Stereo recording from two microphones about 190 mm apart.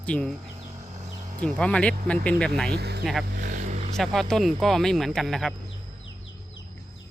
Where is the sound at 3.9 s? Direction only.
Centre (ahead or behind).